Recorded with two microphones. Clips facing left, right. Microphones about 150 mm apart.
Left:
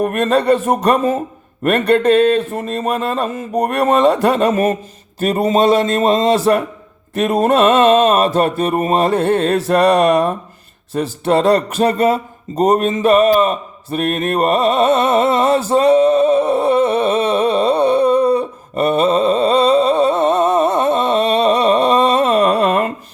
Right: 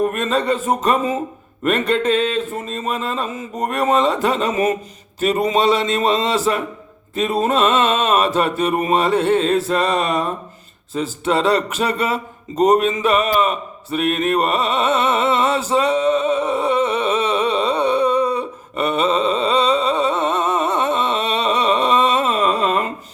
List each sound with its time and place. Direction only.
0.0 s speech: 60° left (ahead or behind)
5.4 s mantra: 45° left (ahead or behind)
7.4 s mantra: 45° left (ahead or behind)
9.5 s mantra: 70° left (ahead or behind)
10.9 s a sound: 50° left (ahead or behind)
22.3 s a sound: 60° left (ahead or behind)